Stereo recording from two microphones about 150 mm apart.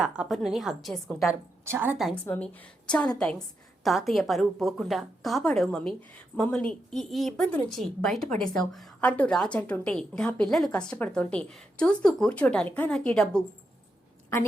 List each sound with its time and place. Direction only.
0.0 s a woman's voice: 5° right (ahead or behind)
1.6 s a woman's voice: 15° right (ahead or behind)
2.2 s a woman's voice: 10° left (ahead or behind)